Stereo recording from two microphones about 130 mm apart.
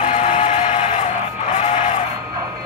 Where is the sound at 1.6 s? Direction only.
45° left (ahead or behind).